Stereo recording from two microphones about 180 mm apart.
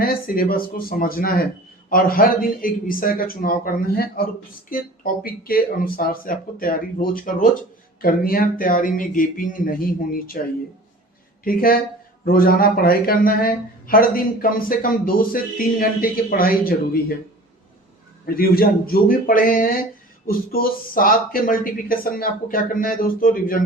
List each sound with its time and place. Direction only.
0.0 s speech: 55° left (ahead or behind)
11.4 s speech: 55° left (ahead or behind)
18.3 s speech: 55° left (ahead or behind)